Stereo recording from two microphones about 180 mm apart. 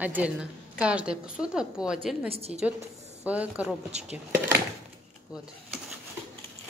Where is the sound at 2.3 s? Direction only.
35° right (ahead or behind).